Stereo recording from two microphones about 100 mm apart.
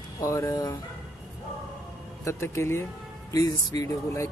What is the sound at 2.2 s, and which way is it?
Speech, 25° left (ahead or behind).